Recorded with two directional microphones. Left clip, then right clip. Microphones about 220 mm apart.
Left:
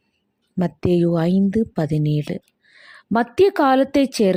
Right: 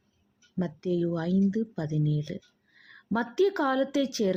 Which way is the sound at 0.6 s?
35° left (ahead or behind).